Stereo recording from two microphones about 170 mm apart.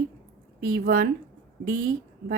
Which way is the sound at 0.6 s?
60° right (ahead or behind).